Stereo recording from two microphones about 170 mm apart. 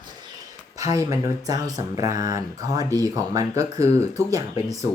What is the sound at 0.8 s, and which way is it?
Speech, 20° right (ahead or behind).